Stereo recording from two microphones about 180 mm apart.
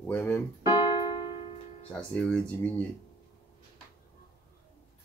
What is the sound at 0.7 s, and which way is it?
Keyboard, 25° left (ahead or behind).